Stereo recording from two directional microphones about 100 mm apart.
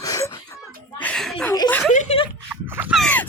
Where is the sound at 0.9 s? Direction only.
15° left (ahead or behind).